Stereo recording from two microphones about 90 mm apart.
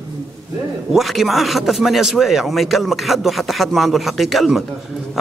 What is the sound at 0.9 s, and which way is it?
A man's voice, centre (ahead or behind).